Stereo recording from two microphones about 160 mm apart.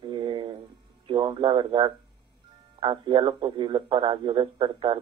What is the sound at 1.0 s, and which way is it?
A man's voice, 30° right (ahead or behind).